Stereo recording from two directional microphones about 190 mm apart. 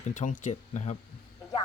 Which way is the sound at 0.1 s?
40° left (ahead or behind).